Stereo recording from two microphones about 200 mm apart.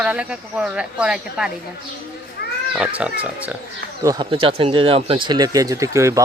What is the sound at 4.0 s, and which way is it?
Speech, 20° right (ahead or behind).